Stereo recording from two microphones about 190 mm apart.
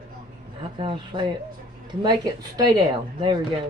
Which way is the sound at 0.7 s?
25° right (ahead or behind).